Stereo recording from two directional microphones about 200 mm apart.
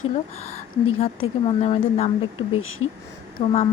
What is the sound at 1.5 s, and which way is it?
Speech, 30° left (ahead or behind).